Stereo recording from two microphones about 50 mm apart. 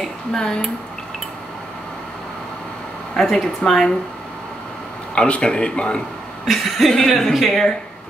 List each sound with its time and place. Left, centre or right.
0.3 s speech: centre
3.2 s speech: centre
5.1 s a man's voice: left
6.4 s speech: centre